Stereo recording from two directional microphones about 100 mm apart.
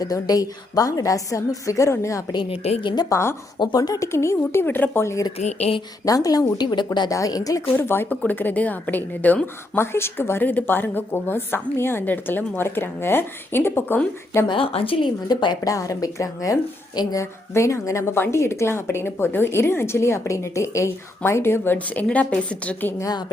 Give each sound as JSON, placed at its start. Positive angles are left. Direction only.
{"t": 0.0, "sound": "a woman's voice", "side_deg": 40}
{"t": 2.5, "sound": "a woman's voice", "side_deg": 90}
{"t": 2.8, "sound": "a woman's voice", "side_deg": 45}
{"t": 3.1, "sound": "a woman's voice", "side_deg": 25}
{"t": 3.6, "sound": "a woman's voice", "side_deg": 45}
{"t": 5.5, "sound": "a woman's voice", "side_deg": 90}
{"t": 6.1, "sound": "a woman's voice", "side_deg": 35}
{"t": 7.1, "sound": "a woman's voice", "side_deg": 35}
{"t": 7.7, "sound": "a woman's voice", "side_deg": 25}
{"t": 14.4, "sound": "speech", "side_deg": 65}
{"t": 15.3, "sound": "a woman's voice", "side_deg": 45}
{"t": 15.7, "sound": "a woman's voice", "side_deg": 35}
{"t": 17.5, "sound": "a woman's voice", "side_deg": 30}
{"t": 23.0, "sound": "a woman's voice", "side_deg": 40}